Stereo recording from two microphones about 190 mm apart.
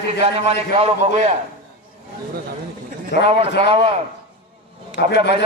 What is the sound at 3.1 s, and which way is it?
Speech, 60° left (ahead or behind).